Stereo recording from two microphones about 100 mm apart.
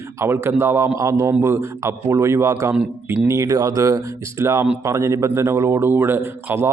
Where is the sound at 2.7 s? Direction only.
10° right (ahead or behind).